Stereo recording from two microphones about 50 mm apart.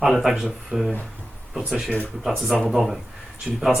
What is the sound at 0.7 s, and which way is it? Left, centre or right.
Speech, right.